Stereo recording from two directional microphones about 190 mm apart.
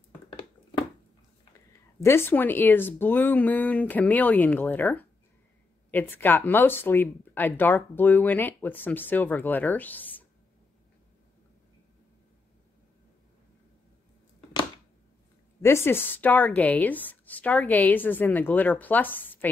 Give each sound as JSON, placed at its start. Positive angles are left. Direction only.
{"t": 0.3, "sound": "a sound", "side_deg": 25}
{"t": 2.0, "sound": "speech", "side_deg": 10}
{"t": 15.6, "sound": "speech", "side_deg": 15}